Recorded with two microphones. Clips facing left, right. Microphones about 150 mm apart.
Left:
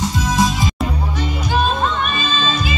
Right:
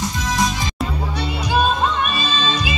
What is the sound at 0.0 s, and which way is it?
Music, 25° left (ahead or behind).